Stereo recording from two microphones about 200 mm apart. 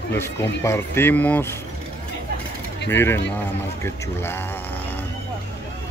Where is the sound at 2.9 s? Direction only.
10° left (ahead or behind).